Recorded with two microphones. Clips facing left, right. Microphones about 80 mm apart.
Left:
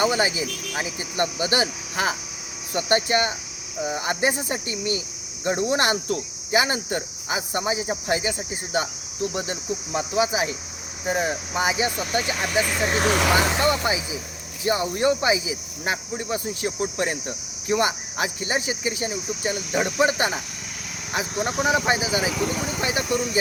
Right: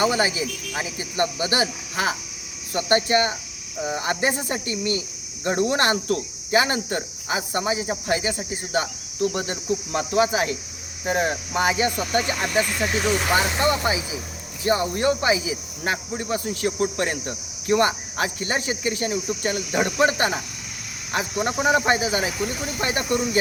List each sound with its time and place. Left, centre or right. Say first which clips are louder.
0.0 s cricket: even; left
8.4 s speech: right 1 dB; left
10.3 s cricket: right 2 dB; centre
11.0 s speech: right 1 dB; centre
12.8 s speech: left 1 dB; left
13.7 s speech: even; right
14.6 s speech: right 1 dB; left
21.2 s speech: right 1 dB; right
21.8 s speech: right 1 dB; centre